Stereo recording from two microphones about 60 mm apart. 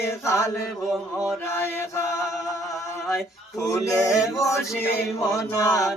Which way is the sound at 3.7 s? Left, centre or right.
Left.